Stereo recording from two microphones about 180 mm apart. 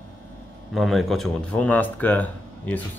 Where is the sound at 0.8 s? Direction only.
Centre (ahead or behind).